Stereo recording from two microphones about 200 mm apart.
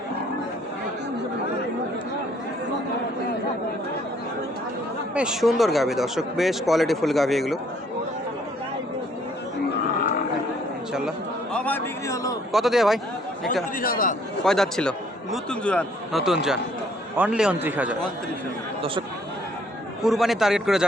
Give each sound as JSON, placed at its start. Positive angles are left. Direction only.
{"t": 5.1, "sound": "speech", "side_deg": -5}
{"t": 11.5, "sound": "a man's voice", "side_deg": 10}
{"t": 12.5, "sound": "speech", "side_deg": 0}
{"t": 13.7, "sound": "speech", "side_deg": 45}
{"t": 14.4, "sound": "a man's voice", "side_deg": 0}
{"t": 20.0, "sound": "speech", "side_deg": 0}